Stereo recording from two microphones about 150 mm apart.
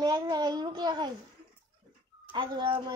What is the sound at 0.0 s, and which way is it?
A child's voice, 25° right (ahead or behind).